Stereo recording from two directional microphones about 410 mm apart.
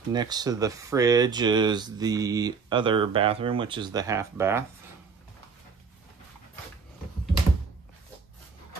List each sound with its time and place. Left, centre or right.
0.1 s speech: centre